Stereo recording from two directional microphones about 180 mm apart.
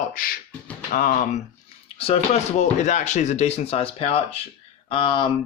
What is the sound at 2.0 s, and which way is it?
Speech, 35° left (ahead or behind).